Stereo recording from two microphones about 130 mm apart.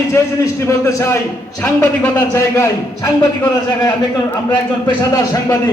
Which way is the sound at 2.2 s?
25° left (ahead or behind).